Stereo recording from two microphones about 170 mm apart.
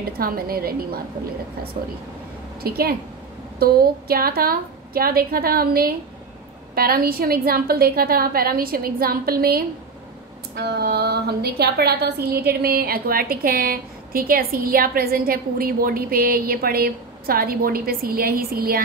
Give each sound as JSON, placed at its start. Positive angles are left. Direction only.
{"t": 0.2, "sound": "a woman's voice", "side_deg": -60}
{"t": 2.6, "sound": "a woman's voice", "side_deg": -65}